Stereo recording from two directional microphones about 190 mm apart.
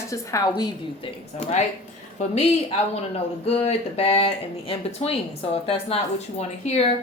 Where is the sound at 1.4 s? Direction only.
35° left (ahead or behind).